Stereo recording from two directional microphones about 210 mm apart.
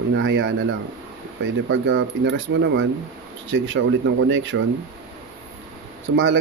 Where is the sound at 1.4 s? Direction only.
60° right (ahead or behind).